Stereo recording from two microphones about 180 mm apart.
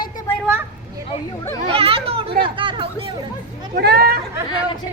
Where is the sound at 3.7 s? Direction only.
60° right (ahead or behind).